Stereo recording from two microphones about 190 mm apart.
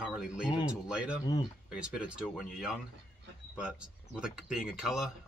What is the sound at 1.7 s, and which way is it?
Speech, 5° right (ahead or behind).